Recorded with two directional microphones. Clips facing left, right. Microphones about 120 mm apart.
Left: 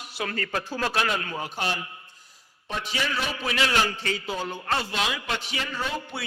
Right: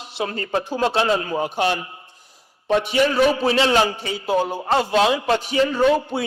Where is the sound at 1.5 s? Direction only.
55° right (ahead or behind).